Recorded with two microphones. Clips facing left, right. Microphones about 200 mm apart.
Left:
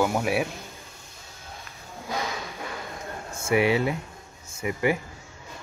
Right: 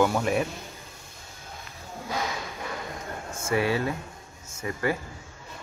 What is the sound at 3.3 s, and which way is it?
Speech, 15° left (ahead or behind).